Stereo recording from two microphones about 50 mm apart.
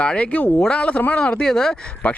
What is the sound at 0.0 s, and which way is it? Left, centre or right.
Speech, left.